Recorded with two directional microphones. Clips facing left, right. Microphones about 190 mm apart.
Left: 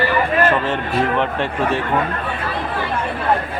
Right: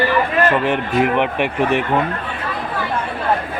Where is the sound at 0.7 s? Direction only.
15° right (ahead or behind).